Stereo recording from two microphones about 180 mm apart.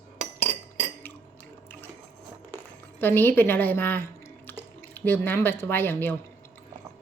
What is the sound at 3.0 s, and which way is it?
Speech, 10° left (ahead or behind).